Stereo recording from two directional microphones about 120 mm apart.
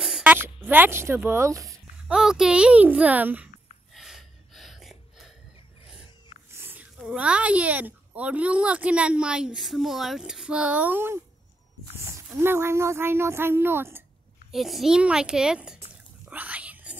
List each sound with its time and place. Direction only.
0.2 s a sound: 15° right (ahead or behind)
0.7 s speech: 20° right (ahead or behind)
2.0 s speech: 5° right (ahead or behind)
3.9 s gasp: centre (ahead or behind)
6.5 s a sound: 15° right (ahead or behind)
7.0 s speech: 10° right (ahead or behind)
12.4 s speech: 20° right (ahead or behind)
14.5 s a child's voice: centre (ahead or behind)
16.3 s whispering: 10° right (ahead or behind)